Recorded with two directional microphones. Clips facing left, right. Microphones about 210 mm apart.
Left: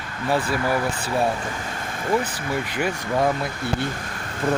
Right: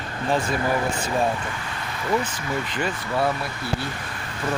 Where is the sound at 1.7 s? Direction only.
45° left (ahead or behind).